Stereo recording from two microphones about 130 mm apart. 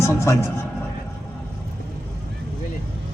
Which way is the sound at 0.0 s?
20° left (ahead or behind).